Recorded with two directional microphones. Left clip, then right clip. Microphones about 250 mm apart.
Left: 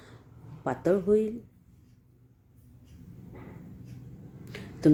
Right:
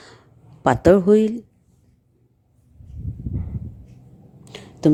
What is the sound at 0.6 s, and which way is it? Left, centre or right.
Speech, right.